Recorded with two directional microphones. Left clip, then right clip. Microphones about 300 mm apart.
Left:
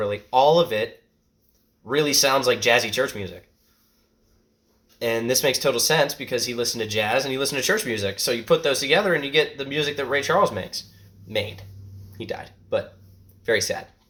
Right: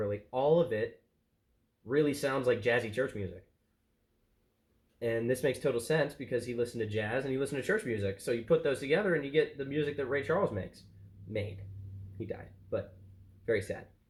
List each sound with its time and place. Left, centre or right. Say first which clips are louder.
0.0 s speech: left 13 dB; centre
1.9 s speech: left 11 dB; centre
4.9 s speech: left 9 dB; centre
12.1 s speech: left 10 dB; centre